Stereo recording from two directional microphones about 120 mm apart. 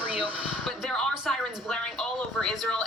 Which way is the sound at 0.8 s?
Centre (ahead or behind).